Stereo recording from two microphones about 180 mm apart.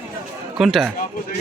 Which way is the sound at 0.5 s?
Centre (ahead or behind).